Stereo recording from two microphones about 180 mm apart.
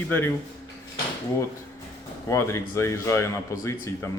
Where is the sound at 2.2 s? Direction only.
15° left (ahead or behind).